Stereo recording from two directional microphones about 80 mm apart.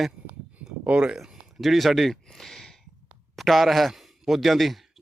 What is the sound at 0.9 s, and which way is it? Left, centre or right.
Speech, centre.